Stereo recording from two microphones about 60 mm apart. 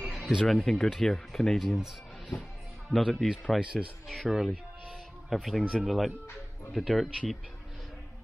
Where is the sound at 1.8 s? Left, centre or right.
Centre.